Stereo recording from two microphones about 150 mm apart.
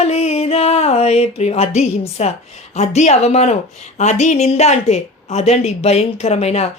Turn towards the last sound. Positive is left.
turn(degrees=45)  # may be behind; listen again after turning